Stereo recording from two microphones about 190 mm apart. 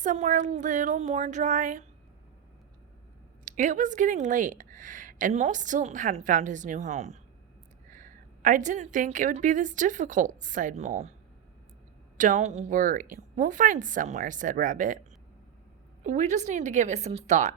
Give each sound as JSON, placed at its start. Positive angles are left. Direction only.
{"t": 0.0, "sound": "speech", "side_deg": -40}
{"t": 3.4, "sound": "speech", "side_deg": -40}
{"t": 12.1, "sound": "a woman's voice", "side_deg": -40}
{"t": 16.0, "sound": "speech", "side_deg": -40}